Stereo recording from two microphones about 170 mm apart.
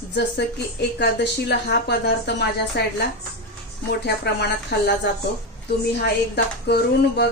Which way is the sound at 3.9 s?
75° left (ahead or behind).